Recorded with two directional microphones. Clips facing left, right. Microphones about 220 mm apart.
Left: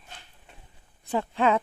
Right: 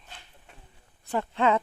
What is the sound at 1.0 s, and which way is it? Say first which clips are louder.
Speech: left 1 dB; 10° left (ahead or behind).